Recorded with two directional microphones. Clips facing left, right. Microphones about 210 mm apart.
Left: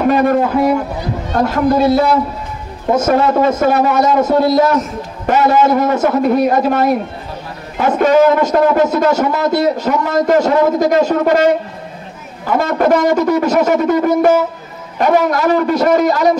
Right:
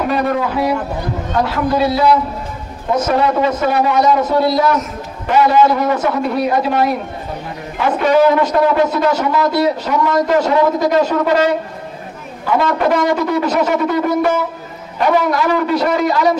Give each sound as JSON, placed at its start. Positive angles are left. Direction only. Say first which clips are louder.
{"t": 0.1, "sound": "speech", "louder": "left 5 dB", "side_deg": 50}
{"t": 12.5, "sound": "speech", "louder": "left 2 dB", "side_deg": 45}